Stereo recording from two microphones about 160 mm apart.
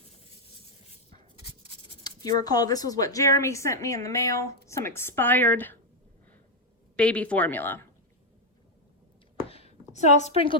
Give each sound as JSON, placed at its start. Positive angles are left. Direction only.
{"t": 1.4, "sound": "writing", "side_deg": 40}
{"t": 2.0, "sound": "a sound", "side_deg": 25}
{"t": 2.4, "sound": "a woman's voice", "side_deg": 25}
{"t": 6.9, "sound": "speech", "side_deg": 5}
{"t": 9.5, "sound": "a sound", "side_deg": 40}
{"t": 10.2, "sound": "a woman's voice", "side_deg": 35}